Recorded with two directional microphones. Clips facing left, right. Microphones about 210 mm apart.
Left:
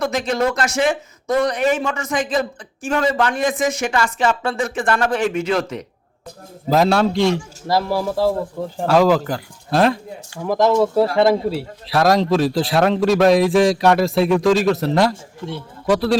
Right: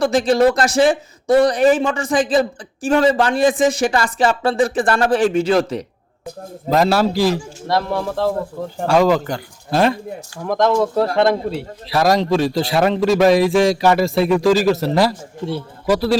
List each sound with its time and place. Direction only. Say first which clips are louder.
0.0 s a man's voice: right 6 dB; 30° right (ahead or behind)
6.7 s speech: even; centre (ahead or behind)